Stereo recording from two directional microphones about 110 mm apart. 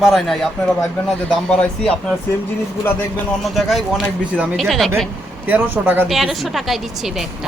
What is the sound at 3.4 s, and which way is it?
A man's voice, centre (ahead or behind).